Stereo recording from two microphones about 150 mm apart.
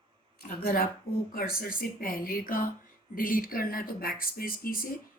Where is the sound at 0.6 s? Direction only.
80° left.